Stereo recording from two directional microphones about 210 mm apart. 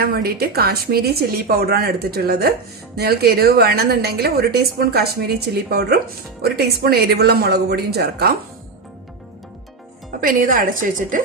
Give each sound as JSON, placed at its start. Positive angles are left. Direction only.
{"t": 0.0, "sound": "speech", "side_deg": -45}
{"t": 6.4, "sound": "speech", "side_deg": -50}
{"t": 10.2, "sound": "a woman's voice", "side_deg": -40}